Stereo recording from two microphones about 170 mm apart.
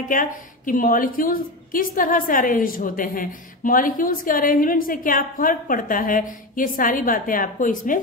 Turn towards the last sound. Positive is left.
turn(degrees=50)  # may be behind; listen again after turning